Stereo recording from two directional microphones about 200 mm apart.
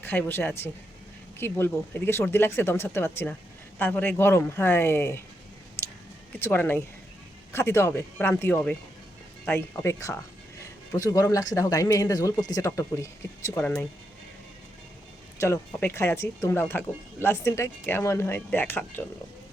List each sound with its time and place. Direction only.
0.0 s speech: 10° left (ahead or behind)
5.8 s a sound: 10° left (ahead or behind)
6.4 s speech: 10° left (ahead or behind)
15.4 s speech: 10° left (ahead or behind)